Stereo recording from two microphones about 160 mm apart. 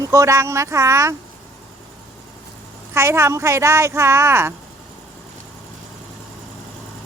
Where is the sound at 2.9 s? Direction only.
15° right (ahead or behind).